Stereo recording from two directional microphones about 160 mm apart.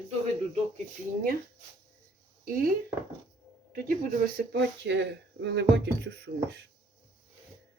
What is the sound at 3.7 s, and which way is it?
Speech, 60° right (ahead or behind).